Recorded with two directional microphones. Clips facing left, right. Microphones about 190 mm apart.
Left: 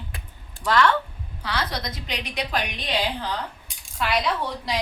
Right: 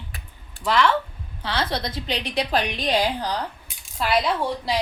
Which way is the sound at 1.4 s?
25° right (ahead or behind).